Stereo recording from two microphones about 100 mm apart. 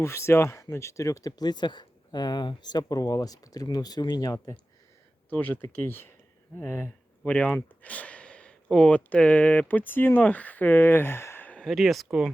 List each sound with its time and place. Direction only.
0.0 s speech: 30° left (ahead or behind)
5.3 s speech: 15° left (ahead or behind)
7.3 s speech: 15° left (ahead or behind)
11.6 s speech: centre (ahead or behind)